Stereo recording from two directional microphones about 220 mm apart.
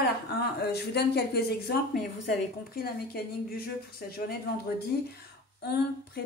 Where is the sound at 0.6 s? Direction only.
50° left (ahead or behind).